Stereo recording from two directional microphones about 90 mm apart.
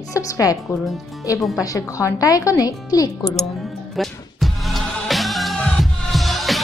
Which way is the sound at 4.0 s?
Centre (ahead or behind).